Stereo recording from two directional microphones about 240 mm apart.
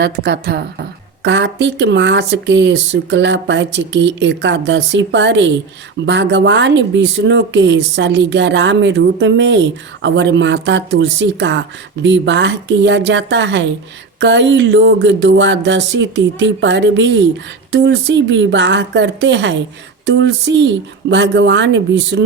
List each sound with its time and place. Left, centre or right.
0.0 s a woman's voice: right